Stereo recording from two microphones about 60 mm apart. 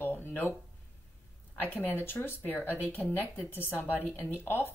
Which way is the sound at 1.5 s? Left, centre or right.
Left.